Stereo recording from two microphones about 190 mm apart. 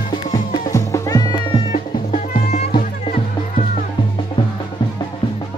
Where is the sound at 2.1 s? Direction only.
40° left (ahead or behind).